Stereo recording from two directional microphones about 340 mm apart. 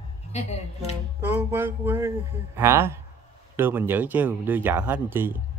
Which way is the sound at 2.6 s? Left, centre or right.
Centre.